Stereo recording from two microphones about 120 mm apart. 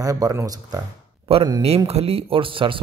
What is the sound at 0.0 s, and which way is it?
Speech, 30° right (ahead or behind).